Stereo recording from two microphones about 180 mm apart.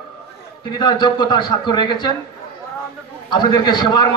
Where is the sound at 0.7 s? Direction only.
25° left (ahead or behind).